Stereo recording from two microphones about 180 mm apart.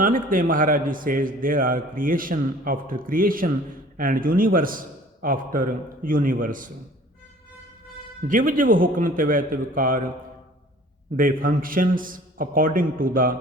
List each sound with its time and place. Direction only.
0.0 s a man's voice: 50° right (ahead or behind)
8.3 s a man's voice: 50° right (ahead or behind)
11.2 s a man's voice: 50° right (ahead or behind)